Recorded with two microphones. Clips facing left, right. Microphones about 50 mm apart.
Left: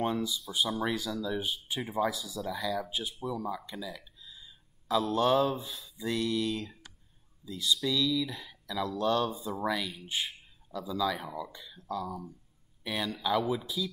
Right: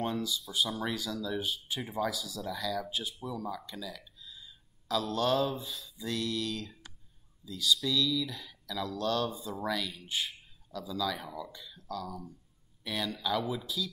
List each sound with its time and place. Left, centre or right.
0.0 s speech: centre